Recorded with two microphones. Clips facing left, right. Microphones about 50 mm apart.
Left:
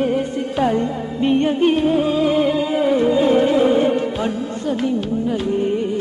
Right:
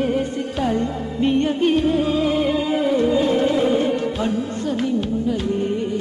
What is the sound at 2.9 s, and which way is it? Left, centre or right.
Music, centre.